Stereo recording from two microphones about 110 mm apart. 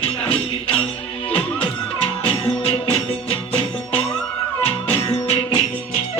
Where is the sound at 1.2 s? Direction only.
60° left (ahead or behind).